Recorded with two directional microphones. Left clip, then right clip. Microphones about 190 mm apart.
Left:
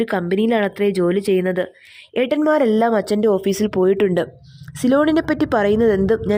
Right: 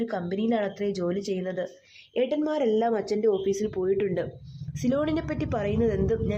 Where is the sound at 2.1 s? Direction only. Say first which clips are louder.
Left 9 dB; 45° left (ahead or behind).